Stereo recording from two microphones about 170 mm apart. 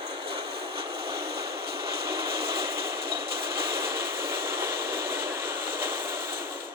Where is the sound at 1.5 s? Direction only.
70° right (ahead or behind).